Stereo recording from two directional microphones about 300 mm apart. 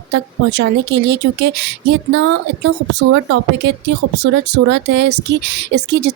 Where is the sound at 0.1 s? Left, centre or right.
Right.